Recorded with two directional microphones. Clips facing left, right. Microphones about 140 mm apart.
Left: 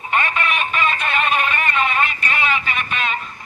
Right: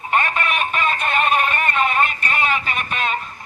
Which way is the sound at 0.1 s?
45° right (ahead or behind).